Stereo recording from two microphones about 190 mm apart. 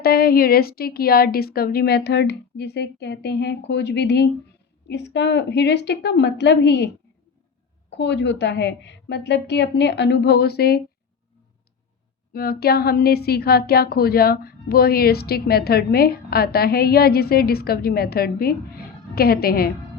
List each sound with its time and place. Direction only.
0.0 s a woman's voice: 55° left (ahead or behind)
12.3 s a woman's voice: 55° left (ahead or behind)